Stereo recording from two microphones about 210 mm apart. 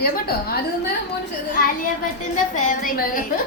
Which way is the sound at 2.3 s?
40° left (ahead or behind).